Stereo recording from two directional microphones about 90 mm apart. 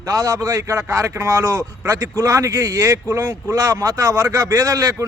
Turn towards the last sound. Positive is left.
turn(degrees=-40)  # may be behind; listen again after turning